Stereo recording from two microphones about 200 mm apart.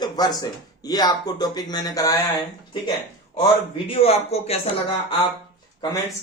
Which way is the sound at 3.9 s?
30° left (ahead or behind).